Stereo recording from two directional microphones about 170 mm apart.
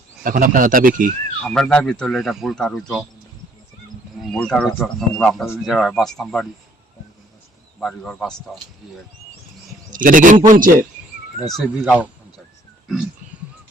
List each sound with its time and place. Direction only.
0.2 s speech: 55° right (ahead or behind)
1.4 s speech: 5° left (ahead or behind)
4.2 s speech: 5° left (ahead or behind)
7.8 s speech: 5° left (ahead or behind)
9.9 s speech: 50° right (ahead or behind)
11.5 s speech: 5° right (ahead or behind)